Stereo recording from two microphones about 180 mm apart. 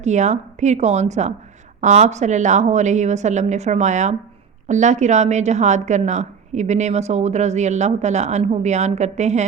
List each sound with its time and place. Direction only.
0.0 s a woman's voice: 40° right (ahead or behind)